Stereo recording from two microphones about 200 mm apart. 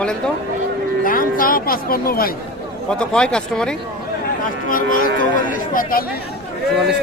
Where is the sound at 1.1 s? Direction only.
45° left (ahead or behind).